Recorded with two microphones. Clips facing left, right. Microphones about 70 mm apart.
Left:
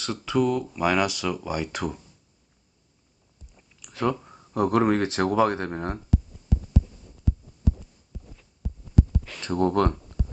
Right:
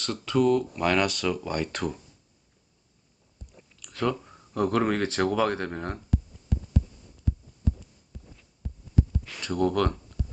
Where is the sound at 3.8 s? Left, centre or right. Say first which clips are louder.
Left 2 dB; centre.